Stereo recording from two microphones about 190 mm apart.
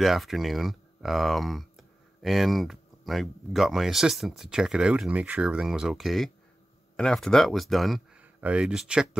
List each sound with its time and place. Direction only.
0.0 s speech: centre (ahead or behind)